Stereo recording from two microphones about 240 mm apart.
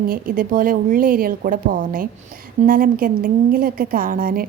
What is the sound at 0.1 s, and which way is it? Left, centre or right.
A woman's voice, right.